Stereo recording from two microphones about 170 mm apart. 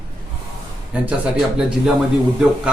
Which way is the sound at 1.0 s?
5° right (ahead or behind).